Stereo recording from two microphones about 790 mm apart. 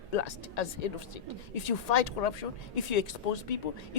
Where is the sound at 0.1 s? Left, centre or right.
Left.